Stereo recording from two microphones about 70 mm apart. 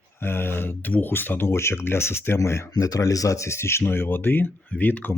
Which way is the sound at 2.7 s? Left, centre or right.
Left.